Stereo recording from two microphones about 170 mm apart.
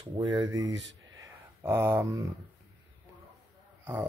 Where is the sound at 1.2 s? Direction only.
15° right (ahead or behind).